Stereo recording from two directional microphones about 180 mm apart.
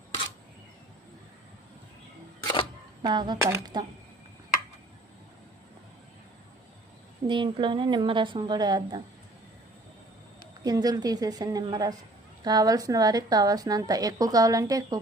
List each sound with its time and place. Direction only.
2.4 s single-lens reflex camera: 25° left (ahead or behind)
3.0 s a woman's voice: 25° right (ahead or behind)
7.3 s a woman's voice: 25° right (ahead or behind)
10.6 s a woman's voice: 20° right (ahead or behind)